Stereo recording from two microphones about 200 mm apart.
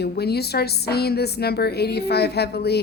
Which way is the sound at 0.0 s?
55° left (ahead or behind).